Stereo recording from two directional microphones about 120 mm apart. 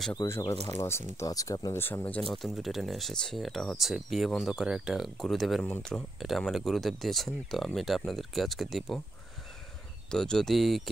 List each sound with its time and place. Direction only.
0.1 s speech: 25° left (ahead or behind); by 9.0 s centre (ahead or behind)
10.1 s speech: 5° left (ahead or behind)